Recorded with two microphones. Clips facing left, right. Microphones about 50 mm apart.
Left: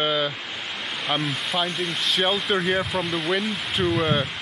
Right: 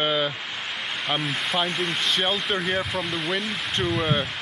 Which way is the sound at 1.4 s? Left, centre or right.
Centre.